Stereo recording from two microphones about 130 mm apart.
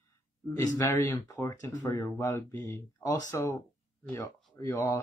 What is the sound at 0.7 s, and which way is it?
Speech, 20° left (ahead or behind).